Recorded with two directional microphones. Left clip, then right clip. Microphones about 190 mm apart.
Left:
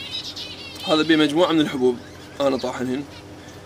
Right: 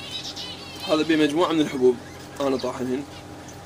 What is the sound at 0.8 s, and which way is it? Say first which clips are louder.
A man's voice: left 3 dB; 40° left (ahead or behind).